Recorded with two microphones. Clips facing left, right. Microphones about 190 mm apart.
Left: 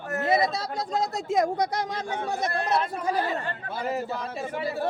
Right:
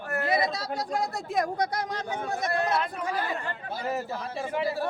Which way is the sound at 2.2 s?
30° left (ahead or behind).